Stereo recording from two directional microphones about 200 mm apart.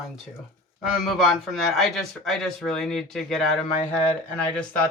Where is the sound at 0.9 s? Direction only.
Centre (ahead or behind).